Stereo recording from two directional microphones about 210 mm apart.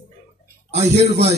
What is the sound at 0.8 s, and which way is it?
Speech, 30° right (ahead or behind).